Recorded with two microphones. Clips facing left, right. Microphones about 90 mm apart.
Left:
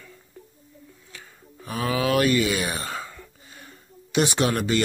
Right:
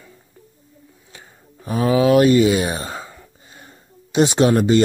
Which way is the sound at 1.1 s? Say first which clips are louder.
Right 2 dB; 25° right (ahead or behind).